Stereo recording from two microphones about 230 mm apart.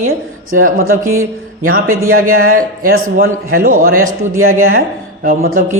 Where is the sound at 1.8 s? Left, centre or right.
Right.